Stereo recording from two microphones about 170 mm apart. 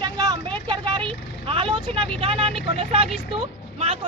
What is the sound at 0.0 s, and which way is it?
Vehicle, 25° right (ahead or behind).